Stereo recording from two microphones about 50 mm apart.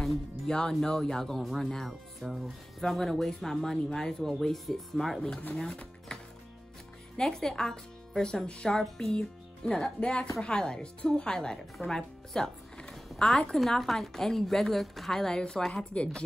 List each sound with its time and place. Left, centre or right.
0.0 s music: centre
0.7 s speech: centre
7.2 s speech: centre